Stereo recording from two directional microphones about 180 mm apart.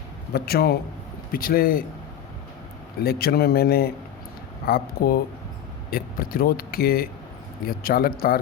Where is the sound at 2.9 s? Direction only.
60° left (ahead or behind).